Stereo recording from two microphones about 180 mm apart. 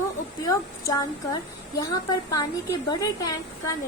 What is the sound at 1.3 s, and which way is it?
A woman's voice, 20° left (ahead or behind).